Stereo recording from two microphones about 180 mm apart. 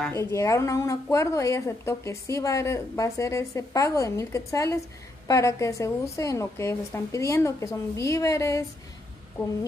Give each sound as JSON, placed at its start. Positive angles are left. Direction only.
{"t": 0.1, "sound": "speech", "side_deg": 15}